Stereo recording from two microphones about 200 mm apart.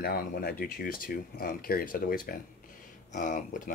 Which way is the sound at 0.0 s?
50° left (ahead or behind).